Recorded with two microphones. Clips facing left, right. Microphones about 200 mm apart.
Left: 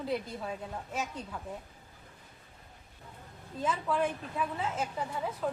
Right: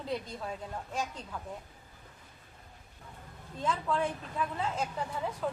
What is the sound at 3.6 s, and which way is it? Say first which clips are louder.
A woman's voice: left 1 dB; 5° left (ahead or behind).